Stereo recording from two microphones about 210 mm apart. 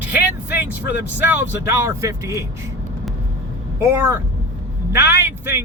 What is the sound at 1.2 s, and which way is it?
Speech, 10° right (ahead or behind).